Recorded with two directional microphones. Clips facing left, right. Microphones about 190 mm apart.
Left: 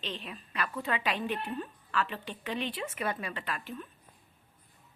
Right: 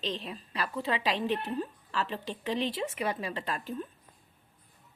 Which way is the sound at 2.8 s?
25° right (ahead or behind).